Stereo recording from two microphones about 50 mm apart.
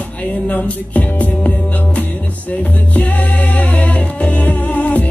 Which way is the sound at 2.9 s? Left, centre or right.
Left.